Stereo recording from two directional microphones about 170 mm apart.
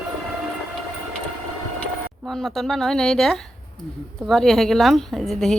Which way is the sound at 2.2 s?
Centre (ahead or behind).